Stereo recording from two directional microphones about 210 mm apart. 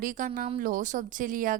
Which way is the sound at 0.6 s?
40° right (ahead or behind).